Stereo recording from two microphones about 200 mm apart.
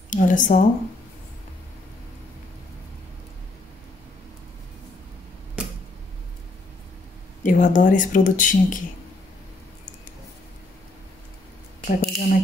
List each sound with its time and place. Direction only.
0.1 s speech: 40° left (ahead or behind)
7.4 s speech: 40° left (ahead or behind)
11.8 s speech: 40° left (ahead or behind)